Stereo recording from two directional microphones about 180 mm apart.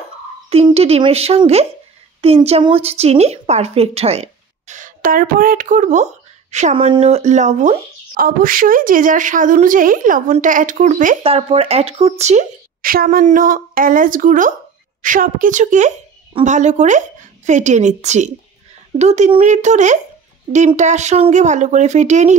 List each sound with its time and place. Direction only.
0.5 s a woman's voice: 35° right (ahead or behind)
11.2 s a woman's voice: 35° right (ahead or behind)